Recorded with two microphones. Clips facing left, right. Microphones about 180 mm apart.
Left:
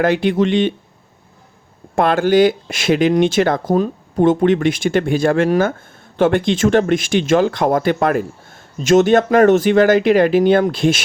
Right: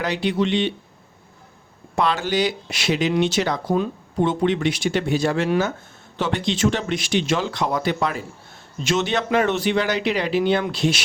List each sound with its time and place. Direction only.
0.0 s speech: 50° left (ahead or behind)
2.0 s speech: 50° left (ahead or behind)